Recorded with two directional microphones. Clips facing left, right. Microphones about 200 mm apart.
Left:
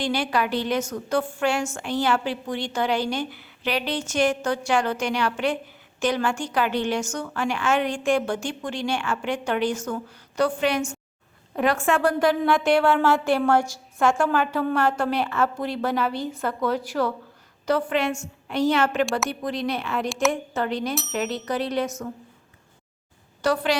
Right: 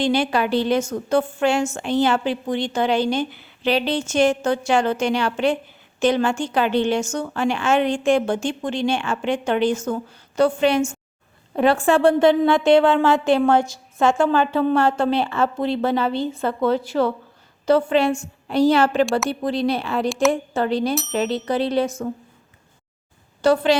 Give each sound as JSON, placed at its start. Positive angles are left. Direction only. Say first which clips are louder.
{"t": 0.0, "sound": "a woman's voice", "louder": "right 5 dB", "side_deg": -25}
{"t": 23.4, "sound": "a woman's voice", "louder": "right 6 dB", "side_deg": -25}